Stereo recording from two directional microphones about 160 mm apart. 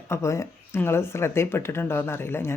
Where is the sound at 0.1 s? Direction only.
20° left (ahead or behind).